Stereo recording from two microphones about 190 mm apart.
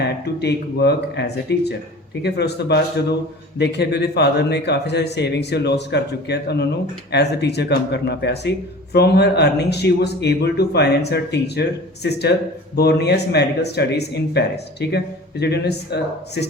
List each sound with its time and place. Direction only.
0.0 s speech: 60° left (ahead or behind)
12.7 s speech: 60° left (ahead or behind)